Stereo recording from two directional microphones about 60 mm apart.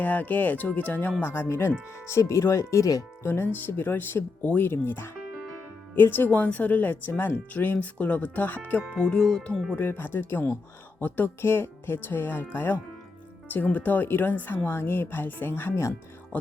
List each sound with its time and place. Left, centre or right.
0.0 s speech: left
1.2 s speech: left
3.2 s a woman's voice: left
8.9 s speech: centre
9.7 s a woman's voice: left
11.0 s speech: left
11.3 s a woman's voice: left